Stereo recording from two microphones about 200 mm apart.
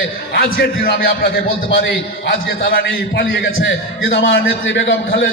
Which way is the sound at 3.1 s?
60° left (ahead or behind).